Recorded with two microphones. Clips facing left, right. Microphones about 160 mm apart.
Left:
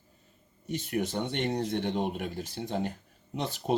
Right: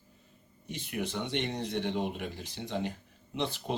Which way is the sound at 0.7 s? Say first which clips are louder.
Left 5 dB; 45° left (ahead or behind).